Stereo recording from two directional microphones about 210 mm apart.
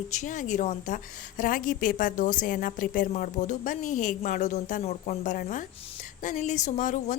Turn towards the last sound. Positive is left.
turn(degrees=40)  # may be behind; listen again after turning